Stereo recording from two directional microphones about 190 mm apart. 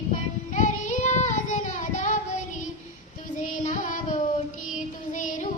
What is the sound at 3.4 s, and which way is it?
Child singing, 40° left (ahead or behind).